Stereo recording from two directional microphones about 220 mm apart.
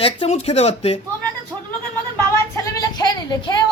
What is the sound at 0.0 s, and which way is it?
Speech, 25° left (ahead or behind).